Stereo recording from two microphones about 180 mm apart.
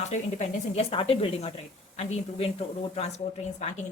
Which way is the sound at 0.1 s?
40° left (ahead or behind).